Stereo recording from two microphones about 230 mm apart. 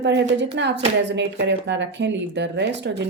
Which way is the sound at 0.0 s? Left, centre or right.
Right.